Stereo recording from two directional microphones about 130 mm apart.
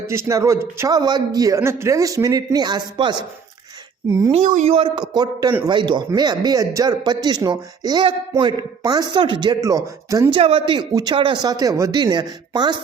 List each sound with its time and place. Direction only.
0.1 s a man's voice: 25° right (ahead or behind)
4.3 s a woman's voice: 65° right (ahead or behind)
4.7 s a man's voice: 45° right (ahead or behind)
5.1 s a man's voice: 30° right (ahead or behind)
10.3 s a man's voice: 45° right (ahead or behind)
10.8 s a man's voice: 35° right (ahead or behind)